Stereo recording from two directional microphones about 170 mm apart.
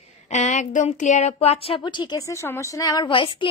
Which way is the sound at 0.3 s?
45° left (ahead or behind).